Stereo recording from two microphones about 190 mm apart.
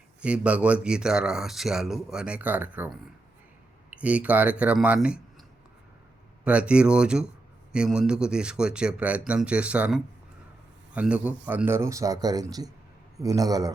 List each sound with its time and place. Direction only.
0.2 s speech: 5° right (ahead or behind)
6.4 s speech: 5° right (ahead or behind)